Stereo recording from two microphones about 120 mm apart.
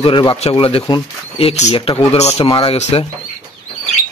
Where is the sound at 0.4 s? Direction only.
50° left (ahead or behind).